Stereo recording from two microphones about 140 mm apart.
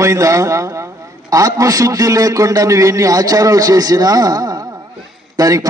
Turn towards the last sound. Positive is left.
turn(degrees=-25)  # may be behind; listen again after turning